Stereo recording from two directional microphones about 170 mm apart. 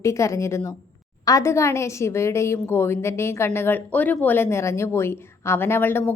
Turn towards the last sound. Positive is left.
turn(degrees=15)  # may be behind; listen again after turning